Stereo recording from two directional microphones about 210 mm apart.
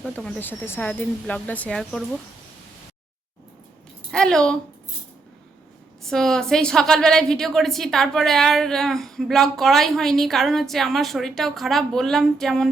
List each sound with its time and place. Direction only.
0.0 s speech: 5° left (ahead or behind)
4.1 s a woman's voice: 5° left (ahead or behind)
6.0 s a woman's voice: centre (ahead or behind)